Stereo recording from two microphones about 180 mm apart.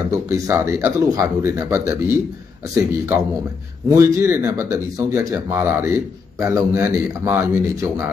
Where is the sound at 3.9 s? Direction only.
15° right (ahead or behind).